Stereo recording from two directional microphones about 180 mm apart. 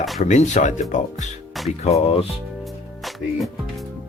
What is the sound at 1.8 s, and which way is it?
Speech, 35° left (ahead or behind).